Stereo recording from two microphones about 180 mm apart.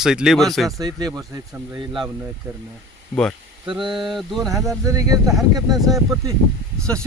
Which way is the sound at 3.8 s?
25° right (ahead or behind).